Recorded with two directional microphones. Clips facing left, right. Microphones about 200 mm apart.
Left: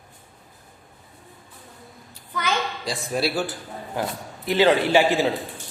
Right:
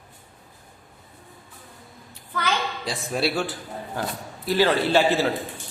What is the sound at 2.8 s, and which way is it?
Speech, centre (ahead or behind).